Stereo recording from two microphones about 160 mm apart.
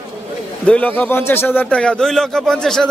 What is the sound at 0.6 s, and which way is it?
A man's voice, 10° left (ahead or behind).